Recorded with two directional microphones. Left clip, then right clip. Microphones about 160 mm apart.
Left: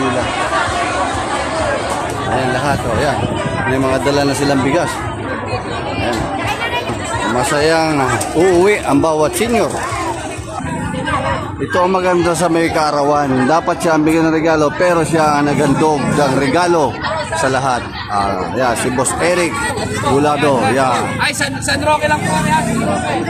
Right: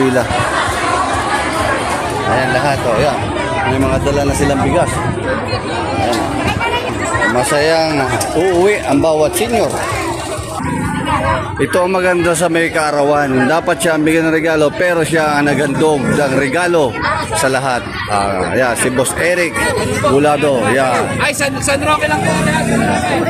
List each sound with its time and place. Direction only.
3.8 s speech: 10° left (ahead or behind)
7.3 s speech: 10° left (ahead or behind)
8.4 s speech: 25° left (ahead or behind)
11.8 s a man's voice: 10° right (ahead or behind)